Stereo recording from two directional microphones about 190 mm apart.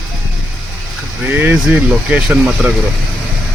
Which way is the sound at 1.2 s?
10° right (ahead or behind).